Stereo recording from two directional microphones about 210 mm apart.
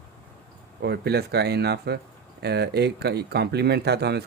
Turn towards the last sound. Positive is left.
turn(degrees=-50)  # may be behind; listen again after turning